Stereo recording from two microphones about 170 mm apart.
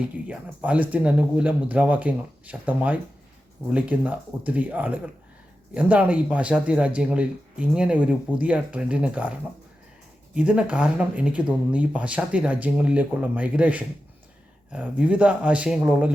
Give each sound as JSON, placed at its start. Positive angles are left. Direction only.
{"t": 0.0, "sound": "speech", "side_deg": -5}